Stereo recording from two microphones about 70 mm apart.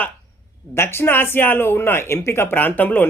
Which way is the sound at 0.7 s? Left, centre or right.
Left.